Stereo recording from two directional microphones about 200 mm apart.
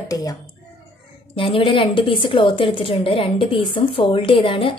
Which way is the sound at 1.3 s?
25° left (ahead or behind).